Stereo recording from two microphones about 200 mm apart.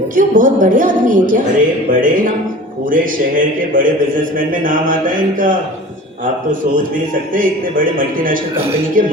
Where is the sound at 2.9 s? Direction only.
45° right (ahead or behind).